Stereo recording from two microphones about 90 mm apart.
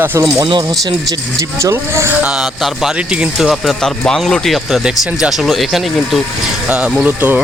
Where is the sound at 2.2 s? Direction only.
10° right (ahead or behind).